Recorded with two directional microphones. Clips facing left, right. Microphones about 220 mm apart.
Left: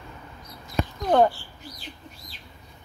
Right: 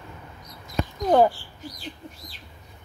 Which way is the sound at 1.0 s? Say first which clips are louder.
Right 1 dB; 5° right (ahead or behind).